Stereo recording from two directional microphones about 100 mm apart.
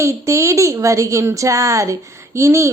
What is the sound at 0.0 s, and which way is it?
A woman's voice, 30° right (ahead or behind).